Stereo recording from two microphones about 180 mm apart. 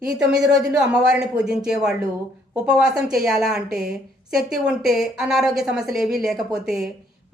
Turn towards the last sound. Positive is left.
turn(degrees=-5)  # may be behind; listen again after turning